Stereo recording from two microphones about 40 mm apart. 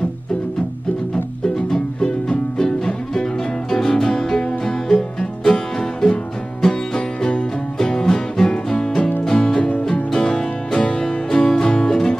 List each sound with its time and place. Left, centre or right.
1.1 s music: centre
9.6 s music: left